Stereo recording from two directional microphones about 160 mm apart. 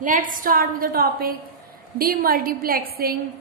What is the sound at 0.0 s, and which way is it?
A woman's voice, 55° right (ahead or behind).